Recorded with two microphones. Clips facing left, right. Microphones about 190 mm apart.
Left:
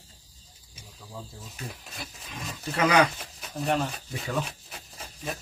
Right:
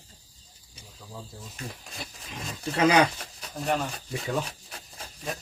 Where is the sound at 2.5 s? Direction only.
35° right (ahead or behind).